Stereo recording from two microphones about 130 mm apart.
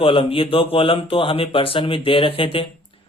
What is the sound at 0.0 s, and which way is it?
A man's voice, 40° left (ahead or behind).